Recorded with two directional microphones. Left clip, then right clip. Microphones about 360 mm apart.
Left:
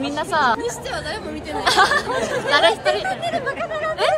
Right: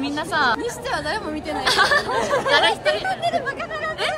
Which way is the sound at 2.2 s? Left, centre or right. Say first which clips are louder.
Right 2 dB; centre.